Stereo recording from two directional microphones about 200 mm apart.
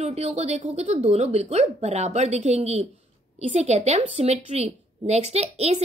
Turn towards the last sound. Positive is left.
turn(degrees=-30)  # may be behind; listen again after turning